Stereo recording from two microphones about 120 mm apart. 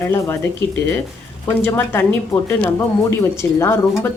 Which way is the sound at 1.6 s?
15° left (ahead or behind).